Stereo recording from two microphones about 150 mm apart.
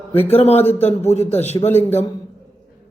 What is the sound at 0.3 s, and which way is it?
Speech, 40° left (ahead or behind).